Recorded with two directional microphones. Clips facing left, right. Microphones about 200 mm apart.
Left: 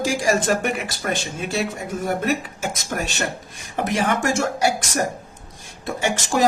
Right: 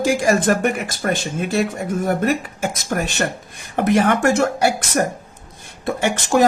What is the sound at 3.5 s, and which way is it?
Speech, 60° right (ahead or behind).